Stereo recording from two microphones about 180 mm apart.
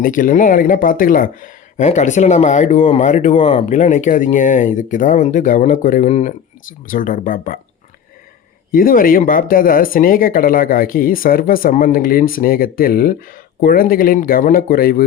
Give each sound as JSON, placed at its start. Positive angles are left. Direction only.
{"t": 0.0, "sound": "speech", "side_deg": 50}
{"t": 8.7, "sound": "speech", "side_deg": 50}